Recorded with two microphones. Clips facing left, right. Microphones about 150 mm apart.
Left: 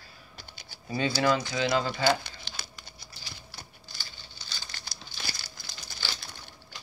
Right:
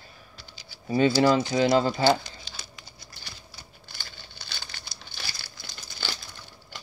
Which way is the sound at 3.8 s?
60° right (ahead or behind).